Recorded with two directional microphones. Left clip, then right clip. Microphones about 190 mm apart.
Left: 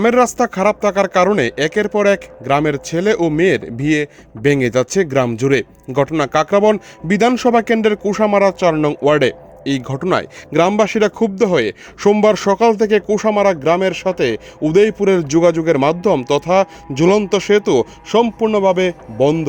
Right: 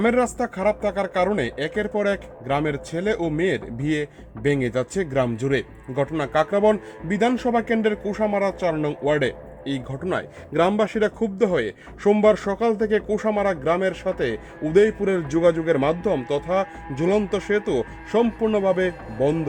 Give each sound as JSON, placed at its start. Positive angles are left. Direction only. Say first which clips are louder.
{"t": 0.0, "sound": "speech", "louder": "left 8 dB", "side_deg": 45}